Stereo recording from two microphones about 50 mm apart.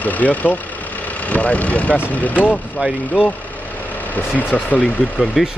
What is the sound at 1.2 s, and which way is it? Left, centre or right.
Speech, left.